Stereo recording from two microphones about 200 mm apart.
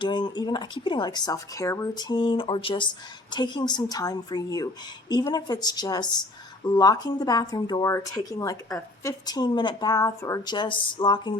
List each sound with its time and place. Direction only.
0.0 s speech: 20° left (ahead or behind)